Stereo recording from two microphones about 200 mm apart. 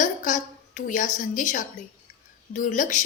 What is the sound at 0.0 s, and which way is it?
A woman's voice, 40° left (ahead or behind).